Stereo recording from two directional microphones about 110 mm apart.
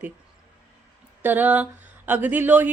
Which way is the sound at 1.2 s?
15° right (ahead or behind).